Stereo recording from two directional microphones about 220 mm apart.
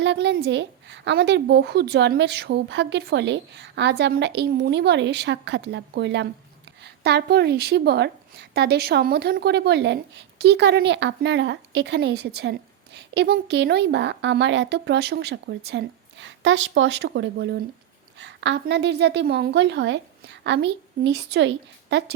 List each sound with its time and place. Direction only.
0.0 s a woman's voice: 50° right (ahead or behind)